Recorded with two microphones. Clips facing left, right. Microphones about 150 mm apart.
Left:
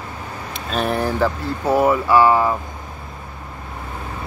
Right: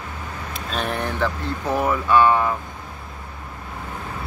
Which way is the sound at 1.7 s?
30° left (ahead or behind).